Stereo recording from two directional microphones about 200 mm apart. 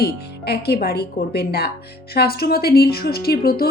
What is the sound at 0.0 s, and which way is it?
Speech, 50° left (ahead or behind).